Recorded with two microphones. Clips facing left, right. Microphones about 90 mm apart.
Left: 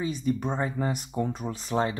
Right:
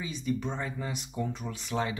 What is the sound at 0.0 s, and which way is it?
Speech, 45° left (ahead or behind).